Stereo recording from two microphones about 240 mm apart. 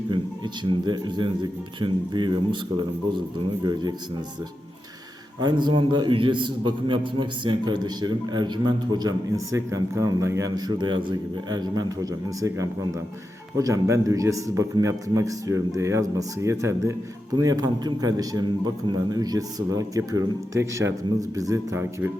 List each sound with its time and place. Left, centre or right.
0.1 s speech: centre
3.6 s a man's voice: centre
5.4 s a man's voice: centre